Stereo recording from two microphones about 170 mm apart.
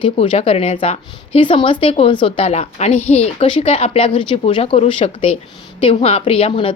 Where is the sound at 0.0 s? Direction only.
35° left (ahead or behind).